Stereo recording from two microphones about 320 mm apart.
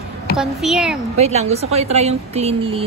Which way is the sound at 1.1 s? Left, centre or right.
Centre.